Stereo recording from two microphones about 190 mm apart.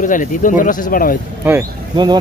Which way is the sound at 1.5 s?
20° right (ahead or behind).